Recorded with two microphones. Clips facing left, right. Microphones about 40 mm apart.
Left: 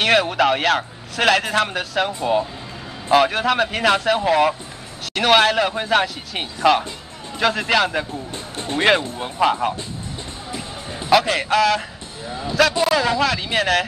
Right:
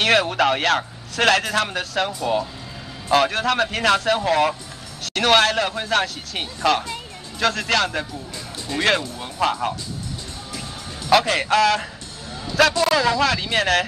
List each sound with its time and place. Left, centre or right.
0.0 s a man's voice: centre
8.1 s music: left
9.2 s speech: centre
11.1 s a man's voice: centre
12.3 s speech: centre
12.8 s a man's voice: centre